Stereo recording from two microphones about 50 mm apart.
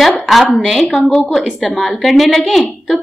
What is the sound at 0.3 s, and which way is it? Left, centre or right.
A woman's voice, centre.